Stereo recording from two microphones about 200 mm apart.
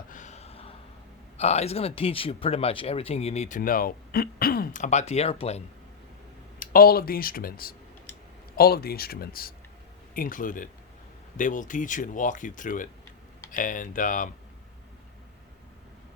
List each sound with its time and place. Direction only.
0.1 s a sound: 35° left (ahead or behind)
1.4 s speech: 30° left (ahead or behind)
6.6 s speech: 50° left (ahead or behind)